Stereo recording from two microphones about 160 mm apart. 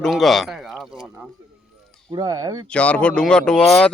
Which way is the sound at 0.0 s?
Centre (ahead or behind).